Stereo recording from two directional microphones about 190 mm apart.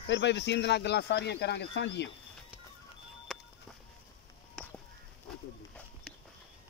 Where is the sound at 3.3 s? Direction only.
Centre (ahead or behind).